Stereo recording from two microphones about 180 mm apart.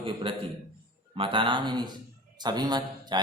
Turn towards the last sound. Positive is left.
turn(degrees=-25)  # may be behind; listen again after turning